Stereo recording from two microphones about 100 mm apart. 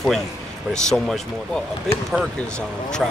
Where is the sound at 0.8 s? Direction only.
5° left (ahead or behind).